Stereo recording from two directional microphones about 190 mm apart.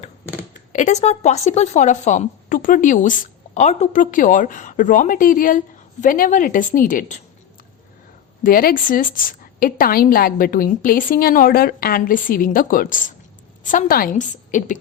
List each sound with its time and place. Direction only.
0.7 s a woman's voice: 40° left (ahead or behind)
8.4 s a woman's voice: 50° left (ahead or behind)